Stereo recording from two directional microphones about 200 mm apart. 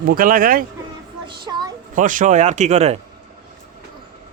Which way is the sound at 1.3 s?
20° right (ahead or behind).